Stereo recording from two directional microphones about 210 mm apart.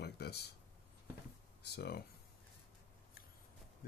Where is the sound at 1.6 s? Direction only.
50° left (ahead or behind).